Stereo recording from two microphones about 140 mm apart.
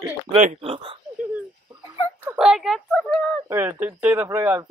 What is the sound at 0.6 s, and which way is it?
Speech, 40° right (ahead or behind).